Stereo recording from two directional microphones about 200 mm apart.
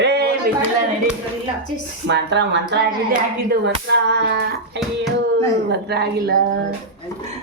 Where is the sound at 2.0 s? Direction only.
60° right (ahead or behind).